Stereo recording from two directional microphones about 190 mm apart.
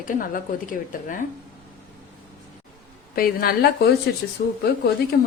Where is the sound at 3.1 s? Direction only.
50° left (ahead or behind).